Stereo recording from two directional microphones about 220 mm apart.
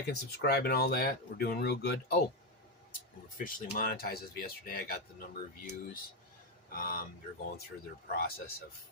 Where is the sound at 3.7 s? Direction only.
45° left (ahead or behind).